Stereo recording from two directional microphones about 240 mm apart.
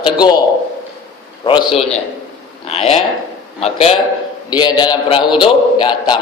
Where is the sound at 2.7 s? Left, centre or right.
Left.